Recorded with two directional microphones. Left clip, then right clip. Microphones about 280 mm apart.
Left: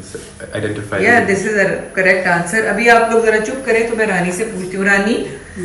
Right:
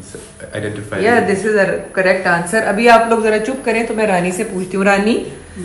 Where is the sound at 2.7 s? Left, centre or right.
Centre.